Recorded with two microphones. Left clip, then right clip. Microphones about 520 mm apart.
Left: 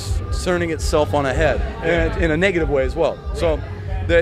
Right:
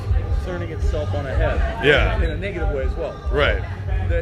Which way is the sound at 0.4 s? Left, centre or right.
Left.